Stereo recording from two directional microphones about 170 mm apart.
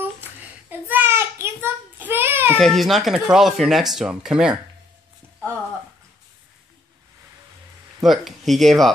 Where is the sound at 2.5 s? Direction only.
Centre (ahead or behind).